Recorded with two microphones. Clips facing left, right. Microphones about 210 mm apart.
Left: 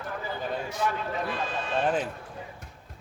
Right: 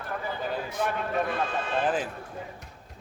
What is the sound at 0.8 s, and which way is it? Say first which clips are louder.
Speech: right 3 dB; 55° right (ahead or behind).